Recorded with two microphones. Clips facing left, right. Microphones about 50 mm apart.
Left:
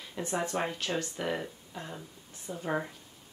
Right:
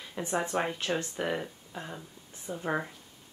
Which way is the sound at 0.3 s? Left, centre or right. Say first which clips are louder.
Right 2 dB; centre.